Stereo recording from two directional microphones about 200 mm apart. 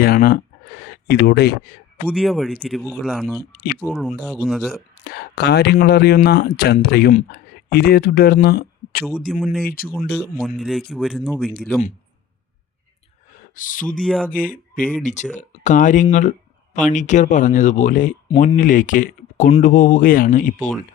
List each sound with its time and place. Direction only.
0.0 s a sound: 50° left (ahead or behind)
2.0 s speech: centre (ahead or behind)
5.0 s speech: 55° left (ahead or behind)
9.0 s speech: centre (ahead or behind)
13.5 s speech: 40° left (ahead or behind)
14.0 s speech: centre (ahead or behind)
14.3 s speech: 45° left (ahead or behind)